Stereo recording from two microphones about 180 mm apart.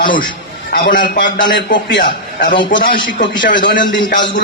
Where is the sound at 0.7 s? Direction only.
50° left (ahead or behind).